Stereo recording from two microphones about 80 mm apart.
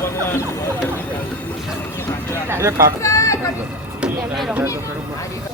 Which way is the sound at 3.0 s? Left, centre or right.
Left.